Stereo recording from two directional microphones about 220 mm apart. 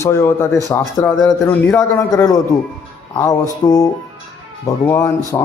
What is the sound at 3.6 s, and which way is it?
Speech, 15° left (ahead or behind).